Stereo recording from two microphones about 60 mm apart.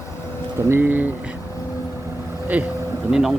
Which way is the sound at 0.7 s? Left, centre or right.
Right.